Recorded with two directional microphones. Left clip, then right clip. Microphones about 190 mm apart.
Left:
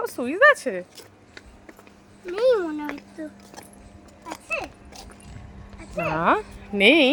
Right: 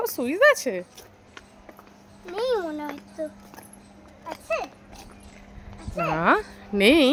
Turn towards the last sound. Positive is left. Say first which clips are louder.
# left 2 dB
turn(degrees=-15)  # may be behind; listen again after turning